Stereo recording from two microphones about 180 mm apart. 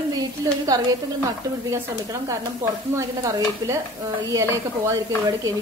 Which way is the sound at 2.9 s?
15° right (ahead or behind).